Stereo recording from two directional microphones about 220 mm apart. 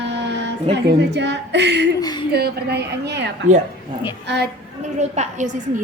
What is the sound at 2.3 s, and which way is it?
A woman's voice, 45° right (ahead or behind).